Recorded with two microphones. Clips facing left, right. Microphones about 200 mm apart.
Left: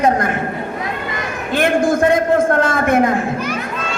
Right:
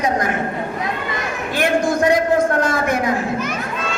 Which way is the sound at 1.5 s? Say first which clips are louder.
Left 3 dB; 50° left (ahead or behind).